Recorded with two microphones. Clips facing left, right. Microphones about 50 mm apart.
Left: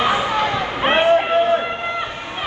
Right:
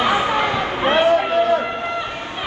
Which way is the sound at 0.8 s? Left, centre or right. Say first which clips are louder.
Left 1 dB; left.